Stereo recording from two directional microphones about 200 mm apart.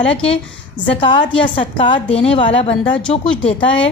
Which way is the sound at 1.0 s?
25° left (ahead or behind).